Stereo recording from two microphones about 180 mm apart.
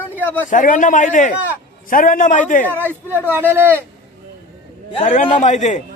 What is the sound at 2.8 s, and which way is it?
Speech, 10° right (ahead or behind).